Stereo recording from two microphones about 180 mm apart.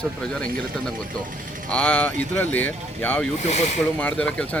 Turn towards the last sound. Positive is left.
turn(degrees=5)  # may be behind; listen again after turning